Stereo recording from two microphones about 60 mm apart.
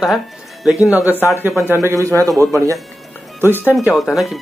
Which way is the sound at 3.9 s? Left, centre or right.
Centre.